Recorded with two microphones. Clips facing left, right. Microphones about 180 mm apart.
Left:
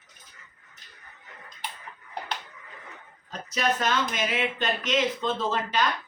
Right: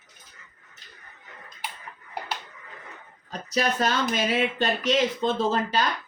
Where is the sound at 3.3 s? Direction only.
35° right (ahead or behind).